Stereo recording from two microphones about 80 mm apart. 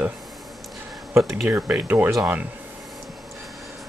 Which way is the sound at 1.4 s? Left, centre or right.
Right.